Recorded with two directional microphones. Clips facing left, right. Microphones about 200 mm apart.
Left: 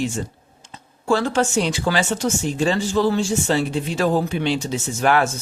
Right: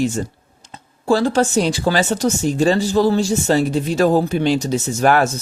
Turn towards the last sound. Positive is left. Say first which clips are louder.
# right 3 dB
turn(degrees=-45)  # may be behind; listen again after turning